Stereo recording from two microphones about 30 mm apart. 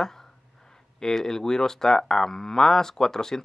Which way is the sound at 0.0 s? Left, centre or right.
Centre.